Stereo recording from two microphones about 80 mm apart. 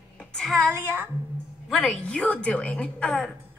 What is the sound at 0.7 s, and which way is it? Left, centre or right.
Speech, right.